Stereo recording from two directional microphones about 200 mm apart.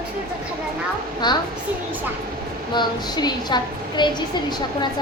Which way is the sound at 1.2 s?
20° left (ahead or behind).